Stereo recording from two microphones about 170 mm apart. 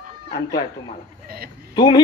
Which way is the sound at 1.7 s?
25° left (ahead or behind).